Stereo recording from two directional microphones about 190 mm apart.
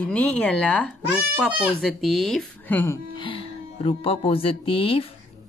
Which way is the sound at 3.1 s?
30° left (ahead or behind).